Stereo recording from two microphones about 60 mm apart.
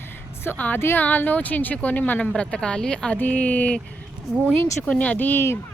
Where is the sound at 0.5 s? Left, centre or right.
Left.